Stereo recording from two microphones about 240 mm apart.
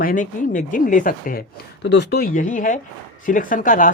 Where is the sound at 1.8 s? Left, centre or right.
Left.